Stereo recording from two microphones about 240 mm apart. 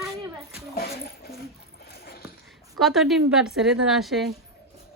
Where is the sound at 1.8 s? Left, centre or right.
Left.